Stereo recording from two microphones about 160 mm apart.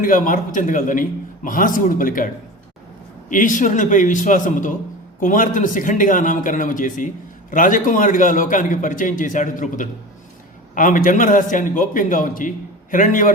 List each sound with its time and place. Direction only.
0.0 s a man's voice: 55° left (ahead or behind)